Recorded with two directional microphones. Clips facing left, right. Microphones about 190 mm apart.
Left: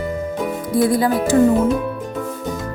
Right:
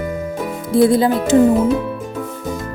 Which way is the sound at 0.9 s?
25° right (ahead or behind).